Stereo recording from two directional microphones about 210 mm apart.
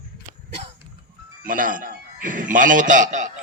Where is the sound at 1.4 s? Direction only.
40° right (ahead or behind).